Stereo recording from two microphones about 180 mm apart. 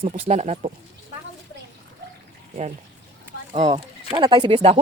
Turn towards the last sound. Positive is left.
turn(degrees=-25)  # may be behind; listen again after turning